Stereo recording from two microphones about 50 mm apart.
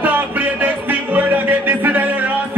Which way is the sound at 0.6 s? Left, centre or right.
Right.